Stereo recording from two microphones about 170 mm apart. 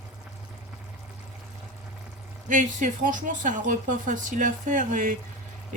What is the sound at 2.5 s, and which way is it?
Speech, 50° right (ahead or behind).